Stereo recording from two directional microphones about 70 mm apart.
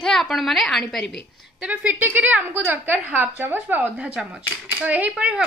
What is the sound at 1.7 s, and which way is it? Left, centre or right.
A woman's voice, right.